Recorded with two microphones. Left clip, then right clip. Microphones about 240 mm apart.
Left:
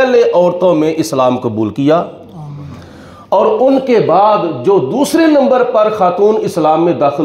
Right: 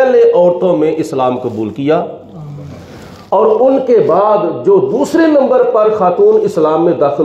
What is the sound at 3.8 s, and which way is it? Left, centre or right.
A man's voice, left.